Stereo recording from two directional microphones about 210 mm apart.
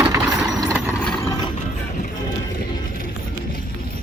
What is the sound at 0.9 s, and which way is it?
Mechanisms, 10° left (ahead or behind).